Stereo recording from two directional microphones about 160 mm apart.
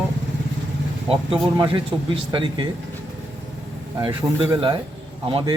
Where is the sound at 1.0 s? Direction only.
35° right (ahead or behind).